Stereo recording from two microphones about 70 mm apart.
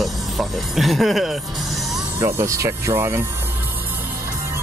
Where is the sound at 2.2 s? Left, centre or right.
Right.